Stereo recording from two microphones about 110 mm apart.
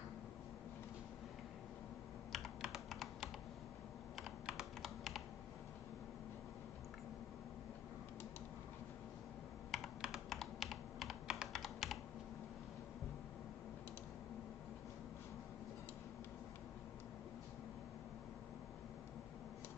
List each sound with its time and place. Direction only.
2.3 s computer keyboard: centre (ahead or behind)
9.7 s computer keyboard: centre (ahead or behind)